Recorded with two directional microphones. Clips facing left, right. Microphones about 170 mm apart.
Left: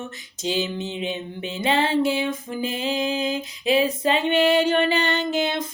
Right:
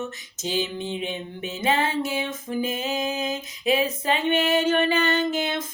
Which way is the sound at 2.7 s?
30° left (ahead or behind).